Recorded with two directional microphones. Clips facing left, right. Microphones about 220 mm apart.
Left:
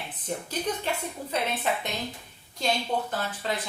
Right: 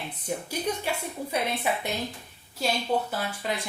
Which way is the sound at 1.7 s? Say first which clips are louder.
Left 1 dB; 10° right (ahead or behind).